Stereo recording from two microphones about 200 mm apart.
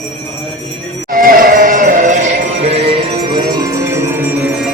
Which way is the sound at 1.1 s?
45° right (ahead or behind).